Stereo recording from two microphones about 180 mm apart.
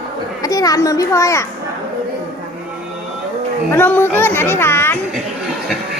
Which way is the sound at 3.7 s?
10° left (ahead or behind).